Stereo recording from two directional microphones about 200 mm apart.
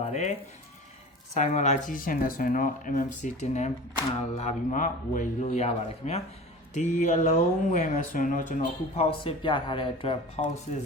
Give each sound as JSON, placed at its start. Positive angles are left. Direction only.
{"t": 0.0, "sound": "speech", "side_deg": 35}
{"t": 1.4, "sound": "speech", "side_deg": 35}
{"t": 9.0, "sound": "speech", "side_deg": 25}